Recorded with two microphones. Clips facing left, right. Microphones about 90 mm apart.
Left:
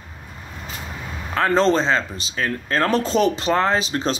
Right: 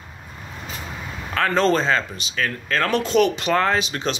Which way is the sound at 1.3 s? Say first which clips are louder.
Left 2 dB; 30° left (ahead or behind).